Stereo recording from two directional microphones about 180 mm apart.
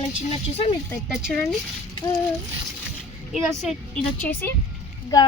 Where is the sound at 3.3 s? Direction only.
Centre (ahead or behind).